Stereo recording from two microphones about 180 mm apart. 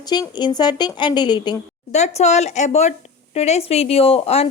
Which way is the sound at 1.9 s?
40° left (ahead or behind).